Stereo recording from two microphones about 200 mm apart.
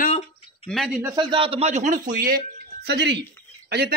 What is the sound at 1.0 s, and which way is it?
Speech, 20° right (ahead or behind).